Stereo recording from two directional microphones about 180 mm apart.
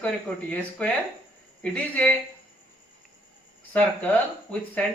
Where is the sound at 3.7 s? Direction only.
10° left (ahead or behind).